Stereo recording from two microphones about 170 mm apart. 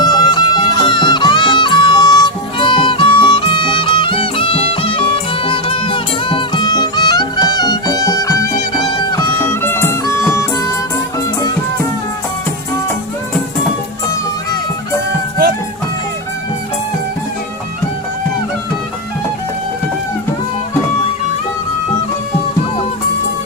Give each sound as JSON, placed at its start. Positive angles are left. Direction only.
{"t": 0.0, "sound": "music", "side_deg": 25}